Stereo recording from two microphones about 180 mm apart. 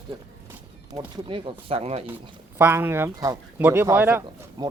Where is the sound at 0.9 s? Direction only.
30° right (ahead or behind).